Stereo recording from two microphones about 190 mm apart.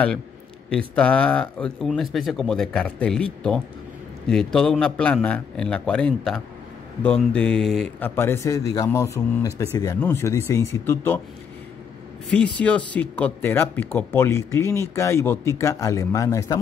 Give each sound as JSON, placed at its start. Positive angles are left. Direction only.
{"t": 0.7, "sound": "speech", "side_deg": 5}
{"t": 8.2, "sound": "speech", "side_deg": 15}
{"t": 12.5, "sound": "speech", "side_deg": 5}